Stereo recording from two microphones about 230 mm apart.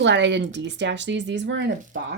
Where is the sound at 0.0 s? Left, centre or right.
Right.